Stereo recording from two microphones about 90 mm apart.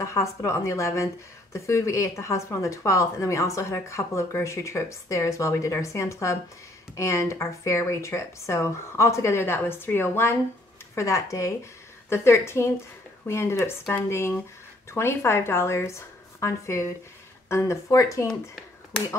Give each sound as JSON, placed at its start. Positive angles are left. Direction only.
{"t": 0.0, "sound": "a woman's voice", "side_deg": 35}